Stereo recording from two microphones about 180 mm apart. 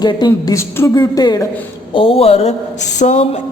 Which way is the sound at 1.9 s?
30° left (ahead or behind).